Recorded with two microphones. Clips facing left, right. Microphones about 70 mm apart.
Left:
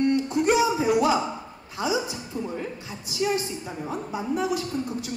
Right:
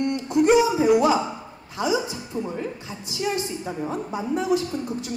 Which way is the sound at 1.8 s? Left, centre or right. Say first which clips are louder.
Right 2 dB; right.